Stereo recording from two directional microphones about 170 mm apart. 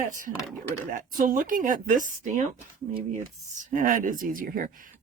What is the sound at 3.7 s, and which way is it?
Speech, 50° right (ahead or behind).